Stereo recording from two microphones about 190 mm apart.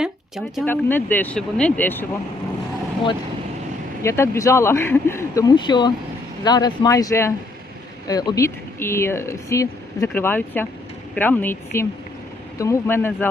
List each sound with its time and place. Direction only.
0.0 s speech: centre (ahead or behind)
0.6 s speech: 10° left (ahead or behind)
4.0 s speech: 15° left (ahead or behind)